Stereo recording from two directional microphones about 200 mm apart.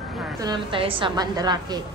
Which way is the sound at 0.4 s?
25° right (ahead or behind).